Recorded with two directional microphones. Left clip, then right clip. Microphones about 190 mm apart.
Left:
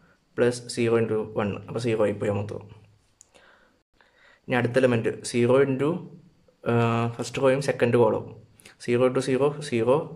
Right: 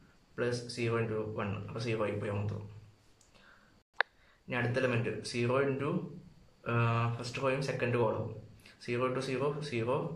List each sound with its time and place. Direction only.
0.4 s speech: 45° left (ahead or behind)
4.5 s speech: 45° left (ahead or behind)